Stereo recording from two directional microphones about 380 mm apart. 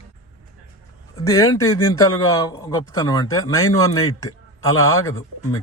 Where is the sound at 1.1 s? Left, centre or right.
Centre.